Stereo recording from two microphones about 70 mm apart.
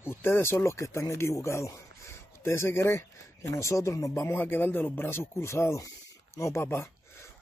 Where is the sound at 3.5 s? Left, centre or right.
Left.